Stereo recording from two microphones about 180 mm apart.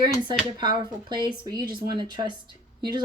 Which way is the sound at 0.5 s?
25° right (ahead or behind).